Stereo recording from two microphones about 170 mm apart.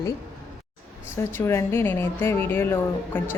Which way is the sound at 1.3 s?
15° left (ahead or behind).